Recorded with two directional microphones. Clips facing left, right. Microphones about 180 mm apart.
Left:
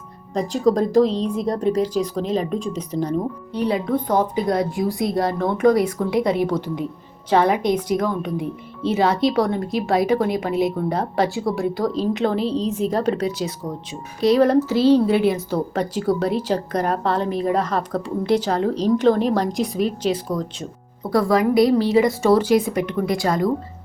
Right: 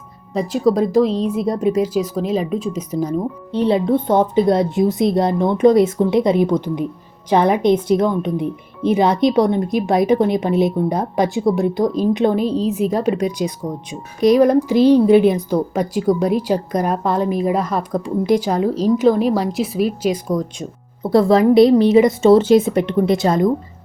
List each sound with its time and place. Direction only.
0.3 s a woman's voice: 5° right (ahead or behind)
3.5 s a woman's voice: 25° right (ahead or behind)
21.0 s speech: 25° right (ahead or behind)